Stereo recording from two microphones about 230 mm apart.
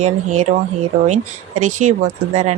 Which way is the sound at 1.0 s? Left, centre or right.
Right.